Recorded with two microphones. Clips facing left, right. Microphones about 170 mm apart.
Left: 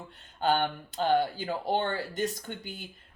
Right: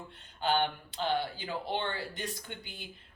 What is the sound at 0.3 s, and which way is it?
Speech, 45° left (ahead or behind).